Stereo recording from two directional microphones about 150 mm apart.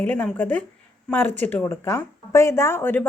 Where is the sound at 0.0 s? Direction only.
10° left (ahead or behind).